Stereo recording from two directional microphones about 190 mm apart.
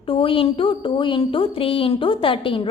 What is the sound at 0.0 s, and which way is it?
A woman's voice, 30° left (ahead or behind).